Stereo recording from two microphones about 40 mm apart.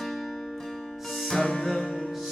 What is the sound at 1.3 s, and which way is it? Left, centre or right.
Music, centre.